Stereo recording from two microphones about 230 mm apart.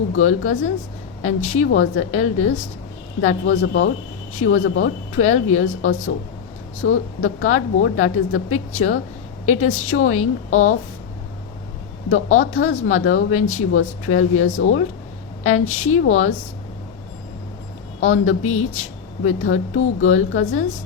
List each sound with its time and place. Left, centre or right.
0.2 s speech: left
1.5 s speech: left
12.1 s speech: left
18.0 s speech: left